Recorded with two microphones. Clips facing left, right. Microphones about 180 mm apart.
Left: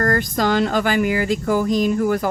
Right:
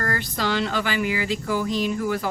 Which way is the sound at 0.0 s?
45° left (ahead or behind).